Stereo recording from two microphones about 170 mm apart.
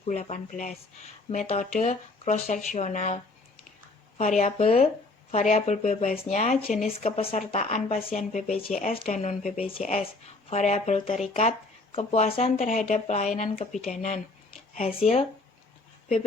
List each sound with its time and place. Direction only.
0.0 s speech: 40° left (ahead or behind)
4.2 s speech: 45° left (ahead or behind)
7.0 s speech: 35° left (ahead or behind)
8.7 s speech: 50° left (ahead or behind)
9.6 s speech: 35° left (ahead or behind); by 14.2 s 50° left (ahead or behind)
14.8 s speech: 35° left (ahead or behind)